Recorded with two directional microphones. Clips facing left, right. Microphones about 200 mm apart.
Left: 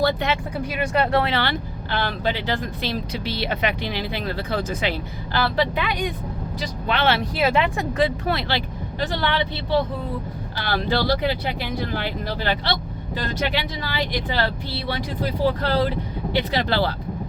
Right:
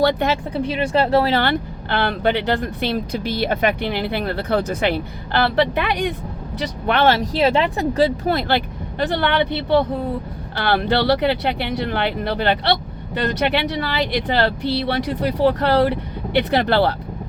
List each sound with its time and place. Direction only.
0.5 s speech: 30° right (ahead or behind)
1.4 s speech: 55° right (ahead or behind)
6.8 s speech: 50° right (ahead or behind)